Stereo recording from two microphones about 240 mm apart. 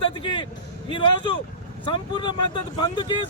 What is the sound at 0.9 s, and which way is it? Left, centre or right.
Speech, centre.